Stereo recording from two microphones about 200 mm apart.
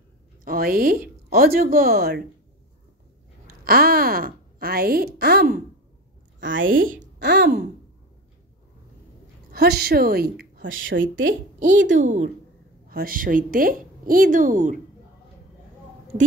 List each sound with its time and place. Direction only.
0.5 s a woman's voice: 45° right (ahead or behind)
3.6 s a woman's voice: 50° right (ahead or behind)
6.6 s a woman's voice: 45° right (ahead or behind)
7.2 s a woman's voice: 60° right (ahead or behind)
9.5 s a woman's voice: 50° right (ahead or behind)
10.7 s speech: 75° right (ahead or behind)
11.9 s a woman's voice: 40° right (ahead or behind)